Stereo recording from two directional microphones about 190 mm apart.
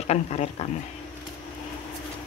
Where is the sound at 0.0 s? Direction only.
35° left (ahead or behind).